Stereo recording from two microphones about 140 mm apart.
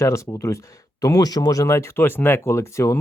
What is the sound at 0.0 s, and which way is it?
Speech, 20° left (ahead or behind).